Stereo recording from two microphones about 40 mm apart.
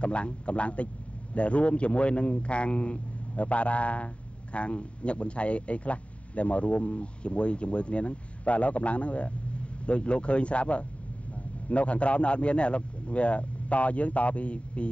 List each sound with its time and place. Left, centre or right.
0.0 s a man's voice: left